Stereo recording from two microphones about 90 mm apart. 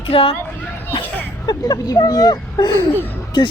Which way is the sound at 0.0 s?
90° left.